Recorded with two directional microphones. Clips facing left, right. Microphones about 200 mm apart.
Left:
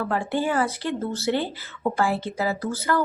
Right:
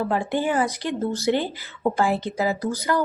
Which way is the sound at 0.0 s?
15° right (ahead or behind).